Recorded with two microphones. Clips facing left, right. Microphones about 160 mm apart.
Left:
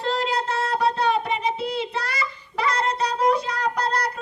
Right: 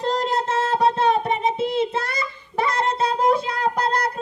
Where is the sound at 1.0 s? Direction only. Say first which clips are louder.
Right 3 dB; 45° right (ahead or behind).